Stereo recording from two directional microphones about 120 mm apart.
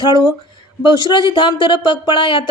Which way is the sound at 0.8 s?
40° left (ahead or behind).